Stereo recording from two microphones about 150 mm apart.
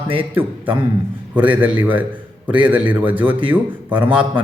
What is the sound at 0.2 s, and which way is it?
Speech, 10° right (ahead or behind).